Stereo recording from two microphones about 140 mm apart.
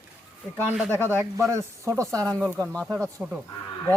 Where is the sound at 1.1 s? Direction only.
15° right (ahead or behind).